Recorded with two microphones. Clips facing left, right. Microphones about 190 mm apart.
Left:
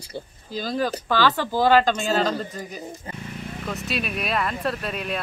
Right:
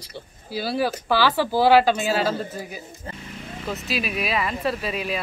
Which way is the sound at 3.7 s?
Centre (ahead or behind).